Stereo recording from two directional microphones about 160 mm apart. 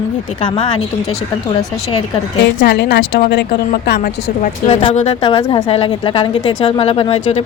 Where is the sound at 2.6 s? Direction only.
90° left.